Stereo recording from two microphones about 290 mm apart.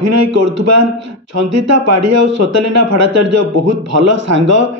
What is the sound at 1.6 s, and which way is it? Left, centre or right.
A man's voice, right.